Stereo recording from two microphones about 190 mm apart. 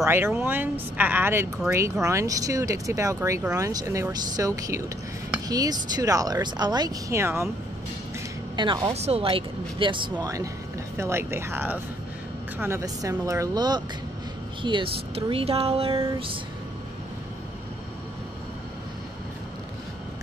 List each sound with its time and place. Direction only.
0.0 s speech: 10° right (ahead or behind)
8.5 s speech: 20° right (ahead or behind)
8.9 s speech: 35° right (ahead or behind)